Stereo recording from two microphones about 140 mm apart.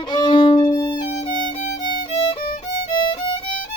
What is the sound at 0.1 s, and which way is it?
Violin, 30° left (ahead or behind).